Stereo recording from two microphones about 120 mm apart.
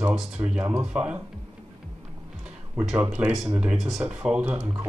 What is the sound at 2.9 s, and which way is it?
Speech, 15° right (ahead or behind).